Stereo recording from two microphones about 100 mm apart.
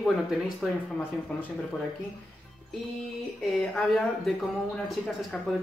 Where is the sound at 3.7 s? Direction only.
5° left (ahead or behind).